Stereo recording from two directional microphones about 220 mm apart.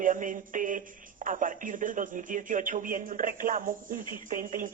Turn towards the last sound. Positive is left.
turn(degrees=-40)  # may be behind; listen again after turning